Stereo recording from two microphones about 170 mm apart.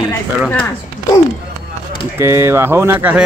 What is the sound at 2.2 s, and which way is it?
Speech, 15° right (ahead or behind).